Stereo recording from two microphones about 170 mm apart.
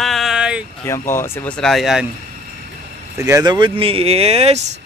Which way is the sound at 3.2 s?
20° right (ahead or behind).